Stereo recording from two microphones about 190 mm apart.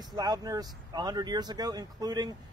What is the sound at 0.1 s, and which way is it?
Speech, 20° right (ahead or behind).